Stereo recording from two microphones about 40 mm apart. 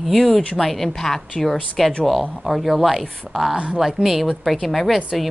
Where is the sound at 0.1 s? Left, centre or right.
Centre.